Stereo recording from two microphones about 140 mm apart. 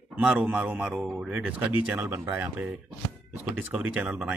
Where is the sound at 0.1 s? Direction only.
10° right (ahead or behind).